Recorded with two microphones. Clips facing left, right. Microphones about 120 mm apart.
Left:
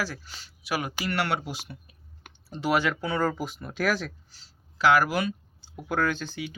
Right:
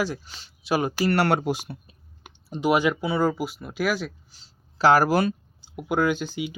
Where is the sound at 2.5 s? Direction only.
15° right (ahead or behind).